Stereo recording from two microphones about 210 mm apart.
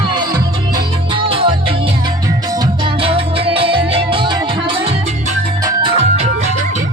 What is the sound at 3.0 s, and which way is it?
Music, 25° right (ahead or behind).